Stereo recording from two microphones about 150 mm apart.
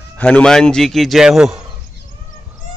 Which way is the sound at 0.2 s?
5° left (ahead or behind).